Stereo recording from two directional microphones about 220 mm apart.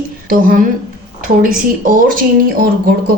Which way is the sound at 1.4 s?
40° right (ahead or behind).